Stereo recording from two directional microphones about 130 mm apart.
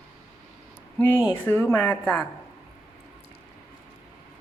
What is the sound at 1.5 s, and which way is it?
Speech, 15° left (ahead or behind).